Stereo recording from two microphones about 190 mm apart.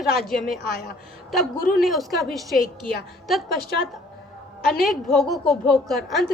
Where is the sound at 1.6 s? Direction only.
50° left (ahead or behind).